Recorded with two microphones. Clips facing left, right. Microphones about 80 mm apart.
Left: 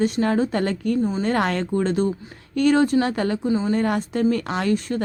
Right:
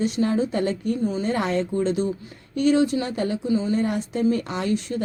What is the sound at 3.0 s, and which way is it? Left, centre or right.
Speech, left.